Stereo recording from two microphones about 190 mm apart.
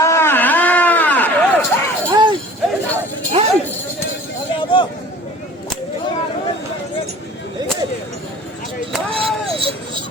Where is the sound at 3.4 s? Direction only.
35° right (ahead or behind).